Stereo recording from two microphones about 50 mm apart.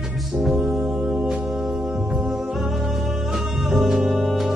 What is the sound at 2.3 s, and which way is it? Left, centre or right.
Music, centre.